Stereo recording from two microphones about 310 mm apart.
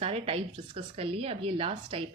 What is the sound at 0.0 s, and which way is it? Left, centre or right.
A woman's voice, centre.